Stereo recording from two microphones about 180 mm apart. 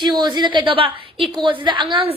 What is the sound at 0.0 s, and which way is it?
A woman's voice, 25° right (ahead or behind).